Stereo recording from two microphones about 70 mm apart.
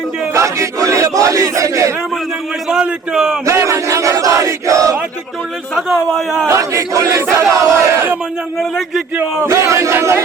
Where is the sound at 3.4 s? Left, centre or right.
Right.